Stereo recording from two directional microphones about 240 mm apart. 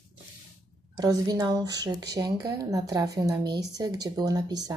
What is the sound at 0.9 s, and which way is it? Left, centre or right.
Speech, centre.